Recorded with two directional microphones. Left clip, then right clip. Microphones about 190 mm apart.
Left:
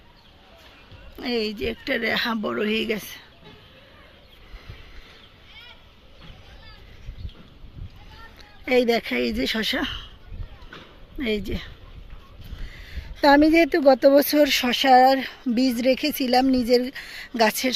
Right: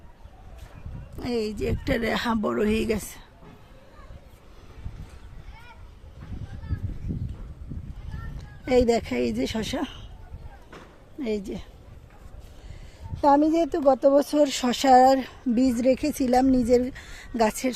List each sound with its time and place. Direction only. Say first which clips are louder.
1.2 s a woman's voice: left 2 dB; centre (ahead or behind)
1.6 s speech: left 2 dB; 20° right (ahead or behind)
8.4 s speech: left 1 dB; 10° right (ahead or behind)
11.2 s a woman's voice: left 3 dB; centre (ahead or behind)
12.6 s a sound: left 8 dB; 5° right (ahead or behind)
13.4 s speech: left 5 dB; 15° left (ahead or behind)
14.3 s a woman's voice: left 3 dB; 5° left (ahead or behind)
14.5 s speech: left 1 dB; 10° right (ahead or behind)